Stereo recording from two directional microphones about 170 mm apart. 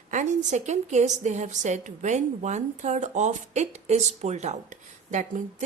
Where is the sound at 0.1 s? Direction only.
45° right (ahead or behind).